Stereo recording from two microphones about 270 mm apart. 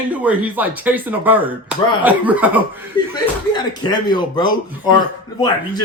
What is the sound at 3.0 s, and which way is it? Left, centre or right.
Speech, centre.